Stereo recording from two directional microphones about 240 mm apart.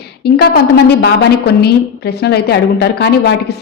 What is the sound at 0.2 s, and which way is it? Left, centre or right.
A woman's voice, left.